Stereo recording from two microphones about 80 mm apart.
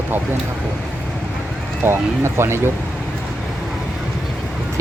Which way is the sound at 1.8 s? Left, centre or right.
Right.